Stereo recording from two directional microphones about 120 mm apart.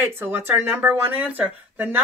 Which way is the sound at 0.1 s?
20° right (ahead or behind).